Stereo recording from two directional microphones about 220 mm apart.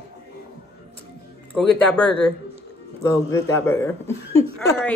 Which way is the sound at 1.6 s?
5° left (ahead or behind).